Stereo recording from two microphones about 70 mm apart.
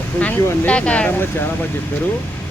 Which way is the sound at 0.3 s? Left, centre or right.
Left.